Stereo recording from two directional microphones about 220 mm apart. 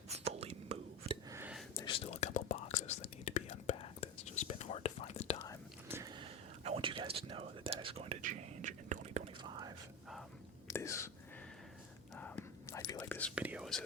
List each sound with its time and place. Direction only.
0.1 s whispering: 30° right (ahead or behind)
1.3 s a sound: 10° right (ahead or behind)
1.7 s whispering: 20° left (ahead or behind)
5.9 s whispering: 15° right (ahead or behind)
10.7 s whispering: 15° left (ahead or behind)
12.1 s whispering: 10° left (ahead or behind)
13.3 s whispering: 5° right (ahead or behind)